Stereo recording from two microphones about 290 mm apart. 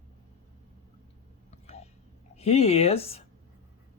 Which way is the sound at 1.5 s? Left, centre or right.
Left.